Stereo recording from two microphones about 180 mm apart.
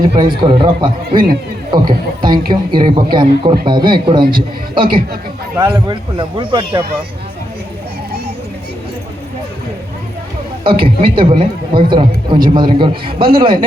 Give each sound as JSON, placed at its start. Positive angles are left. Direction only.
{"t": 0.0, "sound": "speech", "side_deg": -30}
{"t": 4.2, "sound": "a man's voice", "side_deg": -55}
{"t": 4.7, "sound": "speech", "side_deg": -25}
{"t": 10.6, "sound": "speech", "side_deg": -30}